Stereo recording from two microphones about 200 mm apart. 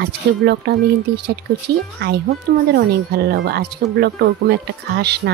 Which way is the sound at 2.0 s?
55° right (ahead or behind).